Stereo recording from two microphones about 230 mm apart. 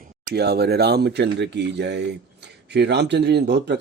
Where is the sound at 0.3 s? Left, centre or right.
Right.